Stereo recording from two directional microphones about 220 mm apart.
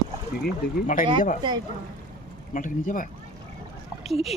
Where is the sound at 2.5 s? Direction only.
35° left (ahead or behind).